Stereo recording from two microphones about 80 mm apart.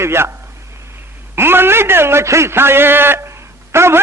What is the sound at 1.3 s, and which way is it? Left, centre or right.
A man's voice, right.